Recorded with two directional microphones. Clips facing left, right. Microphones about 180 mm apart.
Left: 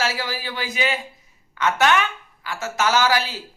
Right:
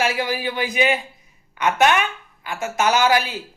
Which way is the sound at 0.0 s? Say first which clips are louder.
Right 4 dB; 15° right (ahead or behind).